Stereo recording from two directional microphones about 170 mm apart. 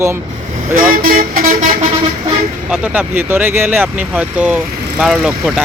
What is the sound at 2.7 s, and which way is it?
Speech, 10° right (ahead or behind).